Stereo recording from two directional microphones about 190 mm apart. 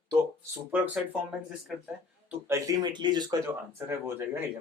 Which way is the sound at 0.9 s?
5° right (ahead or behind).